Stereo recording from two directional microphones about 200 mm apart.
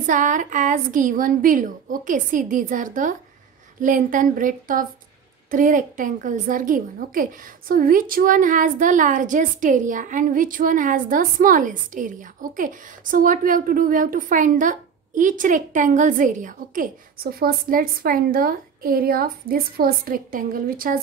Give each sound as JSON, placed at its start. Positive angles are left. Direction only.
{"t": 0.0, "sound": "a woman's voice", "side_deg": -40}